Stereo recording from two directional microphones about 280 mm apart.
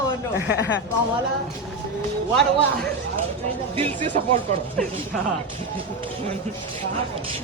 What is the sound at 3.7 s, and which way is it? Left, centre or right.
Speech, centre.